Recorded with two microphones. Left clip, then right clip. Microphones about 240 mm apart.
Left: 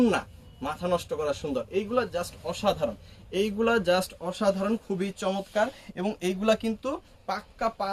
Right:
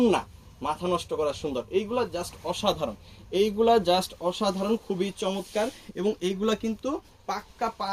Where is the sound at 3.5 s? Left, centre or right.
Centre.